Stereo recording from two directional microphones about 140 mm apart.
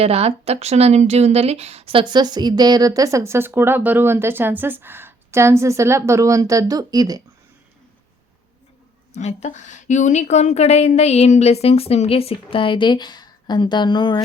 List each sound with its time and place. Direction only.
0.0 s speech: 45° right (ahead or behind); by 7.2 s 25° right (ahead or behind)
9.1 s a woman's voice: 55° left (ahead or behind); by 14.2 s 35° left (ahead or behind)